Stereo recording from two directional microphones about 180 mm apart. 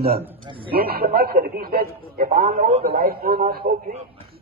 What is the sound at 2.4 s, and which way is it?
Speech, 35° right (ahead or behind).